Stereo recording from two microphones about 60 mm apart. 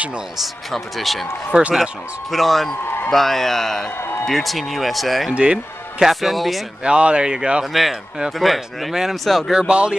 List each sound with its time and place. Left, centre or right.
0.4 s speech: centre
1.5 s speech: centre
2.3 s speech: centre
5.3 s speech: centre
6.8 s speech: centre
8.4 s speech: centre
9.5 s speech: centre